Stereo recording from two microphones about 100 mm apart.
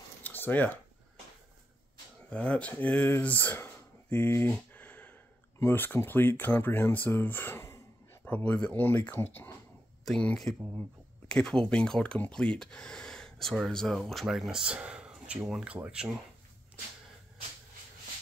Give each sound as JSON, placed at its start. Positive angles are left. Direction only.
{"t": 0.2, "sound": "a sound", "side_deg": 20}
{"t": 2.2, "sound": "speech", "side_deg": 10}
{"t": 10.0, "sound": "speech", "side_deg": 5}